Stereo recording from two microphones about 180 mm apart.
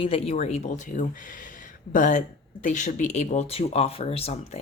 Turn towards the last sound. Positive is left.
turn(degrees=35)  # may be behind; listen again after turning